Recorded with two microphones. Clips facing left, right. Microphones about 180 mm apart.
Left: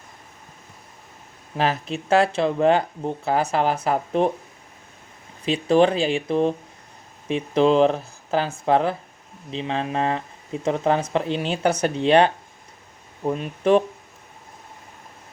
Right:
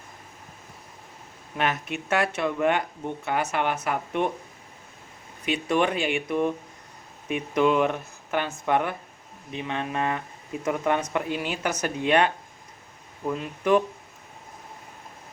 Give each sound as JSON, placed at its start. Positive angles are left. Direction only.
{"t": 1.5, "sound": "speech", "side_deg": 30}
{"t": 5.5, "sound": "speech", "side_deg": 30}